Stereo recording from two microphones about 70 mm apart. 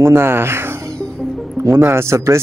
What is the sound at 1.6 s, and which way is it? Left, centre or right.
Speech, right.